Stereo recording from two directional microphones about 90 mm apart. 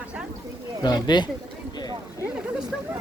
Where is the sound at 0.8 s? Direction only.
50° left (ahead or behind).